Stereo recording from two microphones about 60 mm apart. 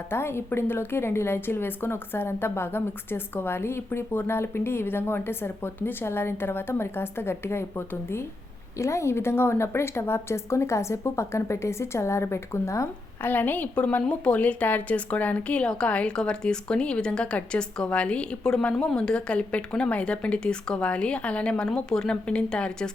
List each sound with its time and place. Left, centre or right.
0.1 s a woman's voice: left
8.8 s a woman's voice: left
13.2 s a woman's voice: left; by 22.9 s centre